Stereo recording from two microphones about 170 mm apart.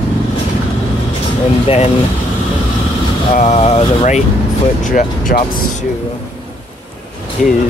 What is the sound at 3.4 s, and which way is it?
Speech, 40° left (ahead or behind).